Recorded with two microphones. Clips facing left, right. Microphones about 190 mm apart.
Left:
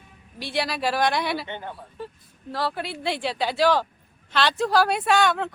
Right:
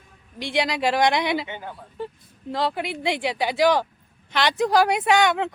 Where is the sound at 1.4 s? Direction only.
5° right (ahead or behind).